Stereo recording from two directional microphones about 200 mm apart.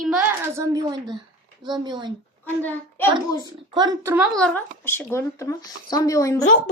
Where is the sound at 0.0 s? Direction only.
5° right (ahead or behind); by 2.1 s 20° right (ahead or behind).